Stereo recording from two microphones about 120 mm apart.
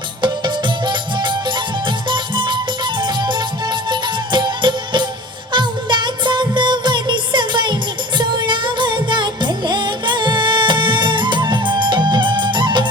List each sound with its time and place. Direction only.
0.2 s music: 40° right (ahead or behind)